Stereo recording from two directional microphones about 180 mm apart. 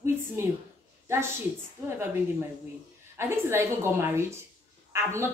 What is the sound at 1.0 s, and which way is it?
Speech, 15° right (ahead or behind).